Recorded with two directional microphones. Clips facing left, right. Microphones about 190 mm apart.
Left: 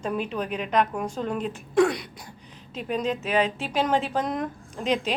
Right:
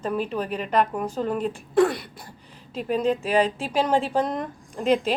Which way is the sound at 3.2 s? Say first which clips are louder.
Right 2 dB; 35° right (ahead or behind).